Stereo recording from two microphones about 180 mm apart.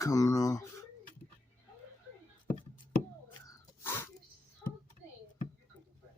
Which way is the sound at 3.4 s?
15° left (ahead or behind).